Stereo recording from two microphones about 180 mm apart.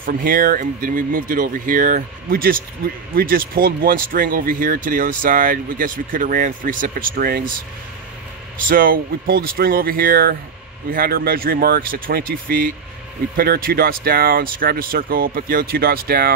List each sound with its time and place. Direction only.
0.0 s speech: 50° right (ahead or behind)
8.6 s speech: 50° right (ahead or behind)